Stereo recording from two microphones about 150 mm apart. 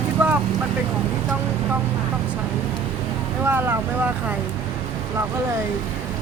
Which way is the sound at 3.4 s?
15° right (ahead or behind).